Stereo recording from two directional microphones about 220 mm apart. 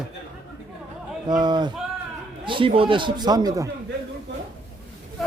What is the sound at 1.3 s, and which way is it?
A man's voice, 20° right (ahead or behind).